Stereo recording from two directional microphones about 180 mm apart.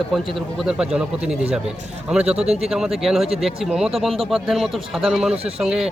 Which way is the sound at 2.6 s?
Centre (ahead or behind).